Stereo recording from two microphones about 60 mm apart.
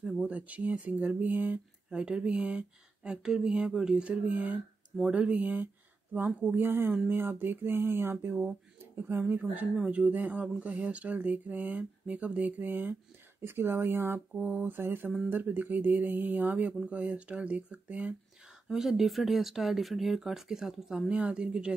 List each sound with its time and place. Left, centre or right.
0.0 s speech: centre
0.3 s speech: right
1.9 s speech: centre
6.1 s a sound: right
9.0 s speech: right
13.5 s a sound: right
14.5 s speech: right
14.8 s a sound: right
15.2 s speech: right
18.7 s speech: centre
21.1 s speech: centre